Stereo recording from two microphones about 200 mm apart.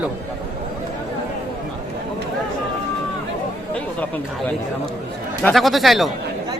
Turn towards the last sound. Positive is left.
turn(degrees=0)  # may be behind; listen again after turning